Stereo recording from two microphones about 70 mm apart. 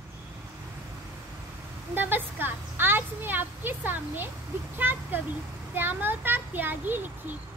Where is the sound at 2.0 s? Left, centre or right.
Right.